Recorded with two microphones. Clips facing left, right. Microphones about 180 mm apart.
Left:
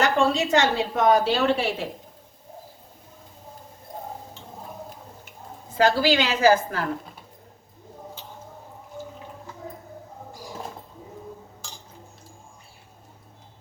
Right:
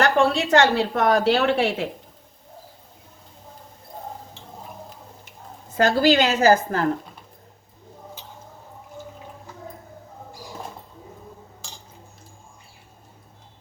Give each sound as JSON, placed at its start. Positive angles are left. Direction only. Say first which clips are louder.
{"t": 0.0, "sound": "a woman's voice", "louder": "right 2 dB", "side_deg": -65}
{"t": 5.7, "sound": "a woman's voice", "louder": "right 2 dB", "side_deg": -50}